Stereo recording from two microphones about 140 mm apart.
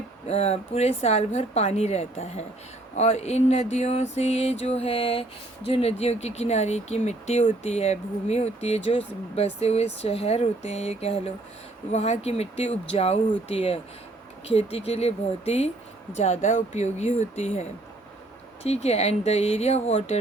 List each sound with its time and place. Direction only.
0.3 s speech: 50° left (ahead or behind)